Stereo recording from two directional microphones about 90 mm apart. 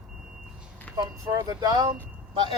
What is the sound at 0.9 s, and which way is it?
Speech, 10° left (ahead or behind).